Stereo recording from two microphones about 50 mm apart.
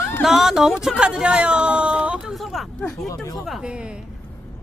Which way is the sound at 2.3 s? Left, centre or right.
Centre.